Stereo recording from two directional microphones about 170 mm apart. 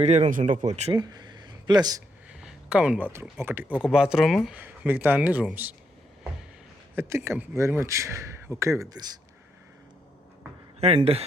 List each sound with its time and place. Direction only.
0.0 s speech: 40° right (ahead or behind)
0.9 s a sound: 25° right (ahead or behind)
2.4 s speech: 5° right (ahead or behind)
4.5 s a man's voice: 10° right (ahead or behind)
6.9 s a man's voice: 15° right (ahead or behind)
10.8 s speech: 35° right (ahead or behind)